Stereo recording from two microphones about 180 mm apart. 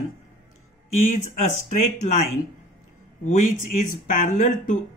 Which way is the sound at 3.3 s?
45° left (ahead or behind).